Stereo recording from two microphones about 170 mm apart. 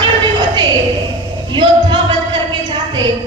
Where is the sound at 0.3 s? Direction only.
25° right (ahead or behind).